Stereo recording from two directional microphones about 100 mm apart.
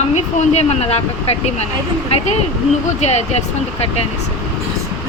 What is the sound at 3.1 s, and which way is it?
Speech, 90° left.